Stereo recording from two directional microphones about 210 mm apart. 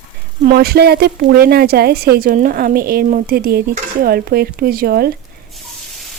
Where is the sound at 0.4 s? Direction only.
45° right (ahead or behind).